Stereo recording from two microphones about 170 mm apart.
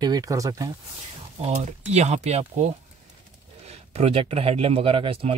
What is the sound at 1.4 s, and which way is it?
Speech, 40° right (ahead or behind).